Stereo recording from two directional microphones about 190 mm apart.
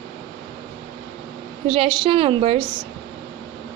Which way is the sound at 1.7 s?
25° right (ahead or behind).